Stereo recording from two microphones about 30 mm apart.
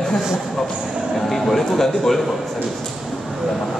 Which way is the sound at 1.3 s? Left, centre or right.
Centre.